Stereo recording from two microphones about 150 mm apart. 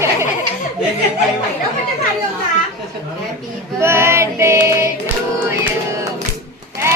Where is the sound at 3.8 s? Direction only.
15° right (ahead or behind).